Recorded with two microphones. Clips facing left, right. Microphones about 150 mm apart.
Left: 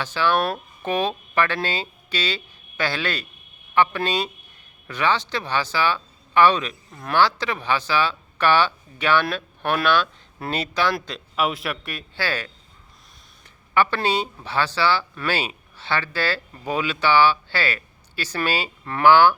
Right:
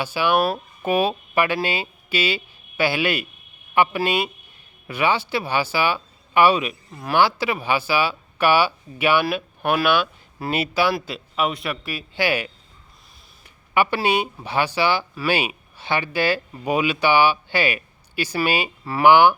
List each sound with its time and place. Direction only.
0.0 s speech: 10° right (ahead or behind)
12.1 s speech: 15° right (ahead or behind)
13.7 s speech: 15° right (ahead or behind)